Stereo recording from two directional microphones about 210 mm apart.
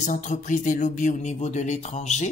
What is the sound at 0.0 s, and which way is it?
Speech, 35° left (ahead or behind).